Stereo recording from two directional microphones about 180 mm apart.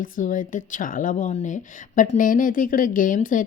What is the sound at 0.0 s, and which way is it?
A woman's voice, 50° left (ahead or behind).